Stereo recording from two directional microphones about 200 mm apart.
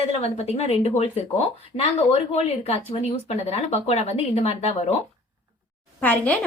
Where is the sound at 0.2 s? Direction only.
30° left (ahead or behind).